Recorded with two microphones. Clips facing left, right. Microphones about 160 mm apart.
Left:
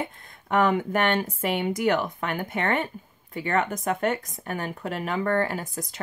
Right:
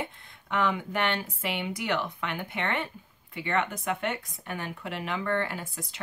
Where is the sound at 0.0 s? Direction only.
45° left (ahead or behind).